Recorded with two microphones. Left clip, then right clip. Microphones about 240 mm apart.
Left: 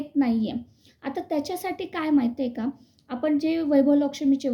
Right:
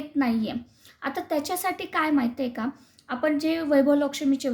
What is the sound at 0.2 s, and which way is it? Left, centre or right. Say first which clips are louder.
A woman's voice: left 1 dB; centre.